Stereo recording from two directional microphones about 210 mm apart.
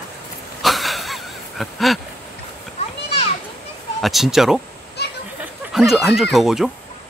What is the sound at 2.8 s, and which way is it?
Children playing, 30° left (ahead or behind).